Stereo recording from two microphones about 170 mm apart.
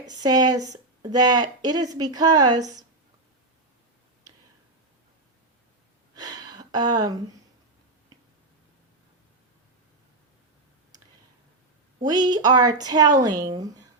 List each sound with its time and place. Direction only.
0.1 s speech: 25° right (ahead or behind)
6.1 s a sound: 25° right (ahead or behind)
12.0 s speech: 25° right (ahead or behind)